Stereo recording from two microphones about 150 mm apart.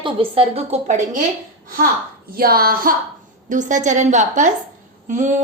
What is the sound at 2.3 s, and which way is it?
Speech, 85° right.